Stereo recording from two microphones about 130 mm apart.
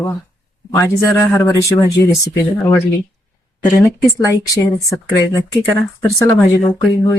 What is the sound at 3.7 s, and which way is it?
Speech, 25° left (ahead or behind).